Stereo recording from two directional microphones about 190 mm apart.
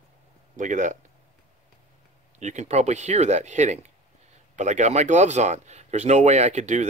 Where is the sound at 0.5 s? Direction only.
40° right (ahead or behind).